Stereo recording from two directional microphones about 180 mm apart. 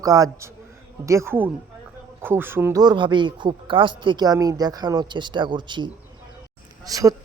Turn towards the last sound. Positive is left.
turn(degrees=-20)  # may be behind; listen again after turning